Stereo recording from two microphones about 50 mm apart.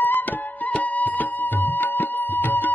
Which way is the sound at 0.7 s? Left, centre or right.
Left.